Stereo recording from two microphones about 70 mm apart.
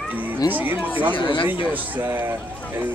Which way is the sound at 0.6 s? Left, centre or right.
Right.